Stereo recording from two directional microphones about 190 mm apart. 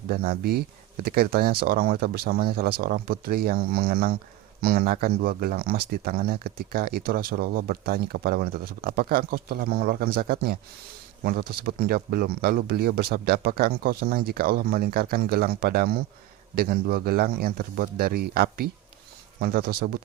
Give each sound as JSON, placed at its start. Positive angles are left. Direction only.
{"t": 0.1, "sound": "speech", "side_deg": -55}